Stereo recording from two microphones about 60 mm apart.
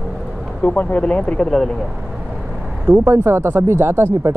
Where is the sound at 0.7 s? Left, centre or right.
Left.